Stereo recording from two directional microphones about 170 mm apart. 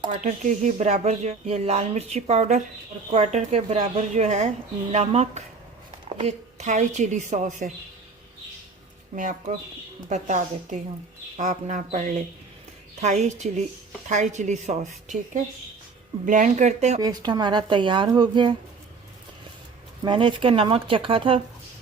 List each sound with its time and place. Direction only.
0.2 s a woman's voice: 45° right (ahead or behind)
10.1 s a woman's voice: 45° right (ahead or behind)
17.0 s speech: 25° right (ahead or behind)
20.1 s speech: 30° right (ahead or behind)